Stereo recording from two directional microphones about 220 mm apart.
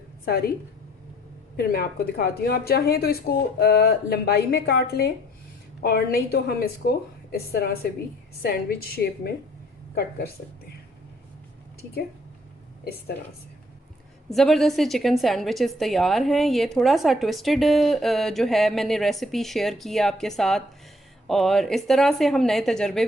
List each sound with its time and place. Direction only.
0.3 s a woman's voice: 45° left (ahead or behind)
1.5 s a woman's voice: 45° left (ahead or behind)
12.8 s a woman's voice: 45° left (ahead or behind)
14.3 s a woman's voice: centre (ahead or behind)